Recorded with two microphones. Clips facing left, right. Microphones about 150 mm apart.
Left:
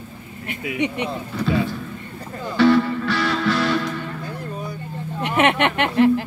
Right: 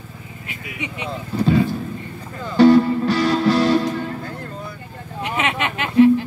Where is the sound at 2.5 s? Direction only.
40° right (ahead or behind).